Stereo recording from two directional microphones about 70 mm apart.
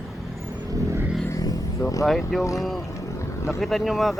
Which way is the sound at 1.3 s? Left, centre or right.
Left.